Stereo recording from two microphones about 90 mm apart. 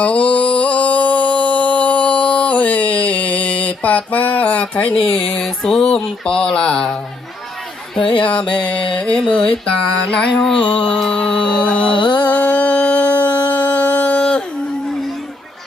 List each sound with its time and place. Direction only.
0.0 s music: 15° left (ahead or behind)
5.1 s mantra: 10° left (ahead or behind)
8.0 s a sound: 70° left (ahead or behind)
8.5 s mantra: 10° left (ahead or behind)
11.8 s music: 65° left (ahead or behind)
12.3 s a sound: 15° left (ahead or behind)